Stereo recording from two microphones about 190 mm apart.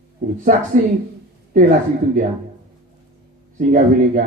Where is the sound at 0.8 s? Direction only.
40° right (ahead or behind).